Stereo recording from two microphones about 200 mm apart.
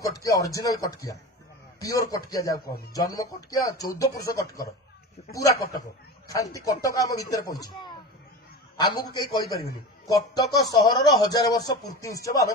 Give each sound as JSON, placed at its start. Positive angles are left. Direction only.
{"t": 0.0, "sound": "speech", "side_deg": 15}
{"t": 8.7, "sound": "speech", "side_deg": 20}